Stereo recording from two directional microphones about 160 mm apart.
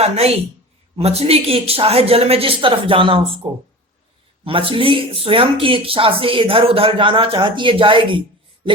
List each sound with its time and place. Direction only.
0.0 s speech: 40° right (ahead or behind)